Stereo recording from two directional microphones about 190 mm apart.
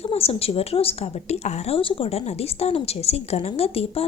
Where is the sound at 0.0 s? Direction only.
30° left (ahead or behind).